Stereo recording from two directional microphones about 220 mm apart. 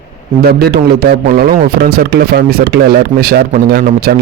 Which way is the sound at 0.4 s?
45° right (ahead or behind).